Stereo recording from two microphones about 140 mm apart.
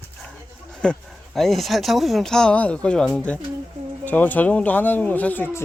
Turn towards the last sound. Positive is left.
turn(degrees=15)  # may be behind; listen again after turning